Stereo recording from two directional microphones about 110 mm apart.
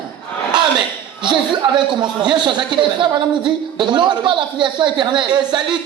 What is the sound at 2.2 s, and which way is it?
A man's voice, 45° right (ahead or behind).